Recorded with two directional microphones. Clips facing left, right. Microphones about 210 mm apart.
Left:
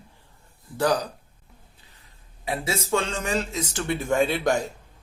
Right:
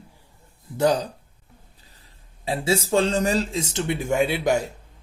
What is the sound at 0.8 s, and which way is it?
Speech, 25° right (ahead or behind).